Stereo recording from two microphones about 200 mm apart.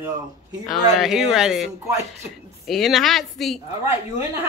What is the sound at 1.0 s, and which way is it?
A woman's voice, centre (ahead or behind).